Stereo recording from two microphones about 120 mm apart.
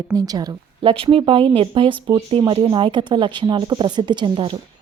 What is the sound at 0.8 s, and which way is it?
A woman's voice, 45° right (ahead or behind).